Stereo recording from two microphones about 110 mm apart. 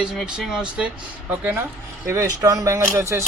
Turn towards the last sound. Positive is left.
turn(degrees=-25)  # may be behind; listen again after turning